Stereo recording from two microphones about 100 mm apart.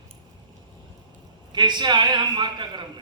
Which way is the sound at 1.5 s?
50° right (ahead or behind).